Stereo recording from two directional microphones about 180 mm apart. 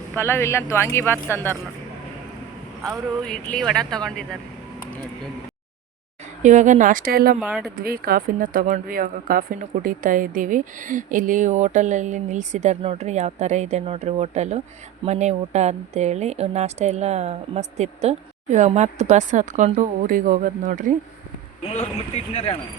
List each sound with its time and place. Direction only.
0.1 s speech: 15° left (ahead or behind)
2.8 s speech: centre (ahead or behind)
6.4 s speech: 45° right (ahead or behind)
7.3 s speech: 5° right (ahead or behind)
7.8 s speech: 55° right (ahead or behind)
21.6 s speech: 35° left (ahead or behind)